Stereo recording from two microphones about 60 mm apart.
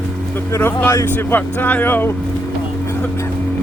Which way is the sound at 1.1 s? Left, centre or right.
Left.